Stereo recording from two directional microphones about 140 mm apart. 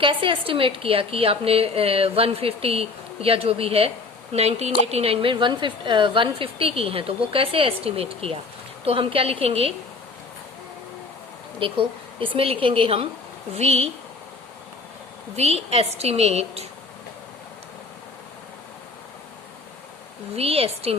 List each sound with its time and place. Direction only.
0.0 s a woman's voice: 40° right (ahead or behind)
11.6 s a woman's voice: 40° right (ahead or behind)
15.4 s a woman's voice: 45° right (ahead or behind)
20.3 s a woman's voice: 45° right (ahead or behind)